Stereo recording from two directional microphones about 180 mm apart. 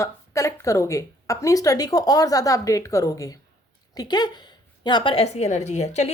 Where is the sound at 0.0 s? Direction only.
15° left (ahead or behind).